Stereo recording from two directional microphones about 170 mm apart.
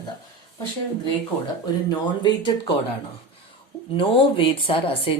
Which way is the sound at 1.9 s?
25° left (ahead or behind).